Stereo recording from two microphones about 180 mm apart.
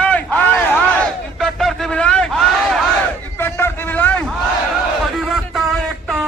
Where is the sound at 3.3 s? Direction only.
10° left (ahead or behind).